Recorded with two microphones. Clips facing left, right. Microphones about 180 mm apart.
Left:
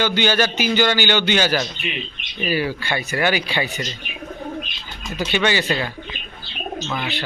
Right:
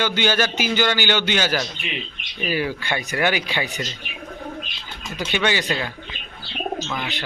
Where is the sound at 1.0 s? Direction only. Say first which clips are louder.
Left 2 dB; 10° right (ahead or behind).